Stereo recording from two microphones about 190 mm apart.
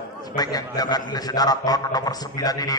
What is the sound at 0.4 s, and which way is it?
Speech, 20° left (ahead or behind).